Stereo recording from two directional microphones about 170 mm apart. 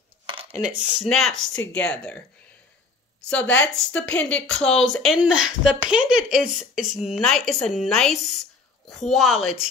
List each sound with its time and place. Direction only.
0.3 s dishes: 35° right (ahead or behind)
0.7 s speech: 5° right (ahead or behind)
3.3 s speech: 5° left (ahead or behind)